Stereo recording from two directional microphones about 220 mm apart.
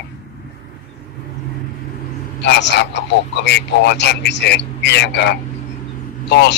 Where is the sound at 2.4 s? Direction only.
50° left (ahead or behind).